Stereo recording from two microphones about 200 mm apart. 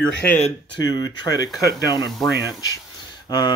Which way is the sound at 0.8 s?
20° left (ahead or behind).